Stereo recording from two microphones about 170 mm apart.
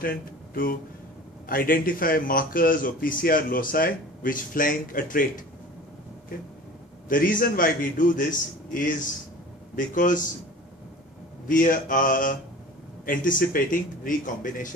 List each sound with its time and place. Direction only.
0.0 s speech: 60° left (ahead or behind)
7.1 s a man's voice: 55° left (ahead or behind)
11.4 s a man's voice: 55° left (ahead or behind)